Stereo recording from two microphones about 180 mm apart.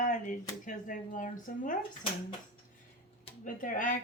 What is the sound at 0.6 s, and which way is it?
Speech, 45° left (ahead or behind).